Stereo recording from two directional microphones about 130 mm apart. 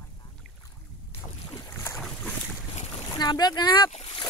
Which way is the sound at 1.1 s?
25° left (ahead or behind).